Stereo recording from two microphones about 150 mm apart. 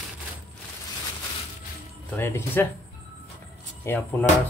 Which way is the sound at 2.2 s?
15° left (ahead or behind).